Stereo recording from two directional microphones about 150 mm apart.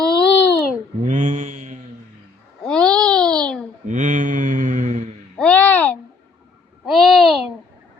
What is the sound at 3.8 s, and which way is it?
Mantra, 55° right (ahead or behind).